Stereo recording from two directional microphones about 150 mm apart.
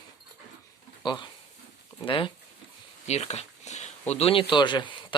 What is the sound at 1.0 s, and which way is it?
Speech, 30° left (ahead or behind).